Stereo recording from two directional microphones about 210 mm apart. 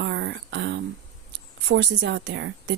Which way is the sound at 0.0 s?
60° right (ahead or behind).